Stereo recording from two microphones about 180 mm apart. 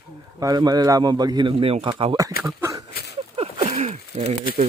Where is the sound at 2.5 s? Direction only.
15° right (ahead or behind).